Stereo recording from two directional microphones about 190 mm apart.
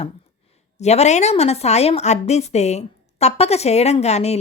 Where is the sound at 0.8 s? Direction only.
35° left (ahead or behind).